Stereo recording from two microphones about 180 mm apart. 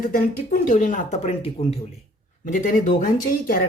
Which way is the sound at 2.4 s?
45° left (ahead or behind).